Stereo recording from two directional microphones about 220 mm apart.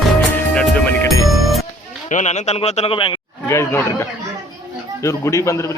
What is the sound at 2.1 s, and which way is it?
A man's voice, 35° left (ahead or behind).